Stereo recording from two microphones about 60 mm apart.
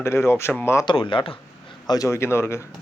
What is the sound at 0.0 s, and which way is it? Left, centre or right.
Speech, left.